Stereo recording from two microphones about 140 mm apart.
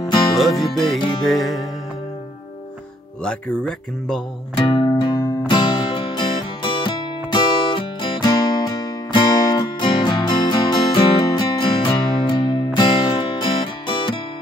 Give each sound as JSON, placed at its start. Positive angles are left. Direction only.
{"t": 0.0, "sound": "music", "side_deg": 30}
{"t": 1.2, "sound": "speech", "side_deg": 0}
{"t": 3.3, "sound": "speech", "side_deg": 5}
{"t": 4.6, "sound": "music", "side_deg": 30}